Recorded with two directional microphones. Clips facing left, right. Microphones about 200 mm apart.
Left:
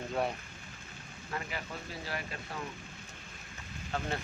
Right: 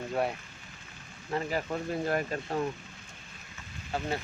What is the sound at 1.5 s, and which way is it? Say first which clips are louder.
Speech: right 10 dB; 45° right (ahead or behind).